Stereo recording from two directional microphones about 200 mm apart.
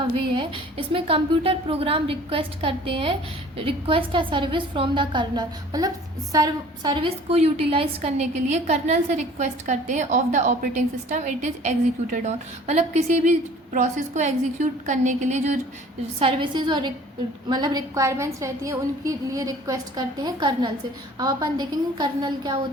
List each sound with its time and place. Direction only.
0.3 s a woman's voice: 25° right (ahead or behind)